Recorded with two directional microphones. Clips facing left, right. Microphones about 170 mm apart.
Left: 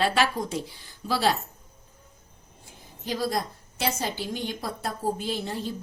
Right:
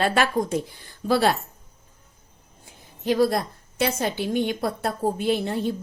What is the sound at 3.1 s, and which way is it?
A woman's voice, 65° right (ahead or behind).